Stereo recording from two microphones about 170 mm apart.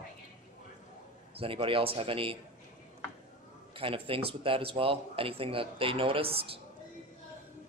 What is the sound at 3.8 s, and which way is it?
Speech, 30° right (ahead or behind).